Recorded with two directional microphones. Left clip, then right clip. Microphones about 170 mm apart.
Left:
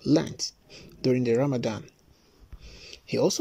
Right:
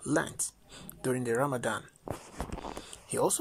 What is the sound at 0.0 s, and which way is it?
Speech, 25° left (ahead or behind).